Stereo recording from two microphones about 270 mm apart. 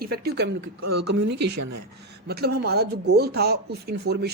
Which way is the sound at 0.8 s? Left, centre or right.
Right.